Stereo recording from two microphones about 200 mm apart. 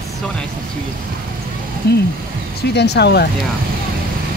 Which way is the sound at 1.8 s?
55° left (ahead or behind).